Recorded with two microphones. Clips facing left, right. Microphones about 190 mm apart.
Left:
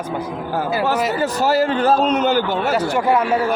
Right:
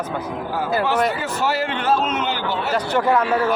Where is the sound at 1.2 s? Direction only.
40° left (ahead or behind).